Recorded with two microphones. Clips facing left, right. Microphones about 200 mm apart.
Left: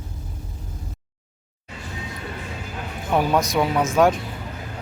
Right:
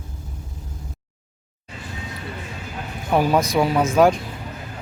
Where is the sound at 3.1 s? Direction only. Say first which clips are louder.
Right 2 dB; centre (ahead or behind).